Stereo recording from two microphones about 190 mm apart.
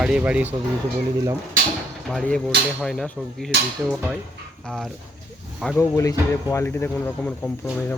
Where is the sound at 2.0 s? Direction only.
Centre (ahead or behind).